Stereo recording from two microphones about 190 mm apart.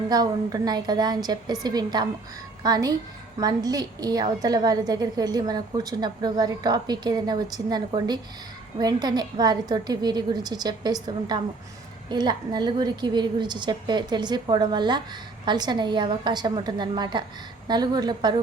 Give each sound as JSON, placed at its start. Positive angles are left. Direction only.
{"t": 0.1, "sound": "a woman's voice", "side_deg": -20}